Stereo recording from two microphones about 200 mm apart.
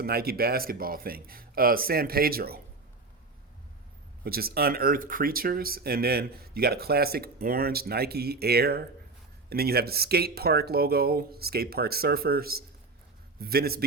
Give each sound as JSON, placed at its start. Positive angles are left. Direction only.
{"t": 0.0, "sound": "speech", "side_deg": -50}
{"t": 4.2, "sound": "speech", "side_deg": -50}